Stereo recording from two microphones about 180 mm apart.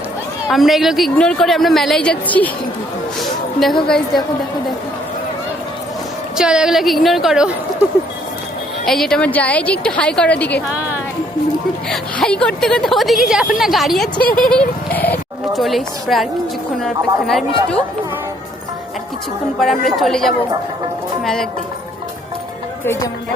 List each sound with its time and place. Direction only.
0.4 s a woman's voice: centre (ahead or behind)
3.2 s a sound: centre (ahead or behind)
3.8 s a woman's voice: 5° left (ahead or behind)
6.3 s a woman's voice: 5° right (ahead or behind)
8.9 s a woman's voice: 5° left (ahead or behind)
10.7 s speech: 10° right (ahead or behind)
11.9 s a woman's voice: 5° left (ahead or behind)
14.2 s speech: 55° left (ahead or behind)
14.4 s a woman's voice: 5° left (ahead or behind)
20.0 s a woman's voice: centre (ahead or behind)
22.8 s speech: 15° left (ahead or behind)